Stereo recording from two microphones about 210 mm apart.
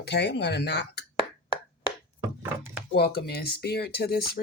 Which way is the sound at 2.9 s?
50° left (ahead or behind).